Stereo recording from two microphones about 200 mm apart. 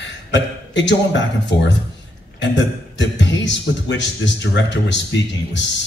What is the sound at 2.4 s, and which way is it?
A man's voice, 60° left (ahead or behind).